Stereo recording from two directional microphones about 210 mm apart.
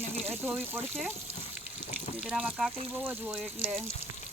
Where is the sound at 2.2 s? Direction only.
Centre (ahead or behind).